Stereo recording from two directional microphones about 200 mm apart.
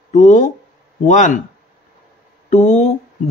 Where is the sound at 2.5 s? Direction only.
35° left (ahead or behind).